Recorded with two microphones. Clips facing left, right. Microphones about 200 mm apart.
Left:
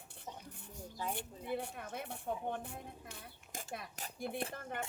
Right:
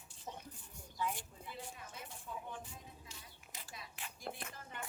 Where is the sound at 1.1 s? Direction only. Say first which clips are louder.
Left 10 dB; 60° left (ahead or behind).